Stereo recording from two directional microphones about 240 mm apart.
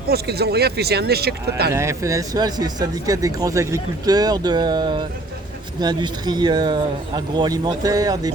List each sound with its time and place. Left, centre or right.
0.1 s speech: right
1.7 s speech: centre